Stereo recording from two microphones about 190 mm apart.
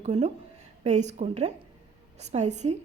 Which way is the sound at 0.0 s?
35° right (ahead or behind).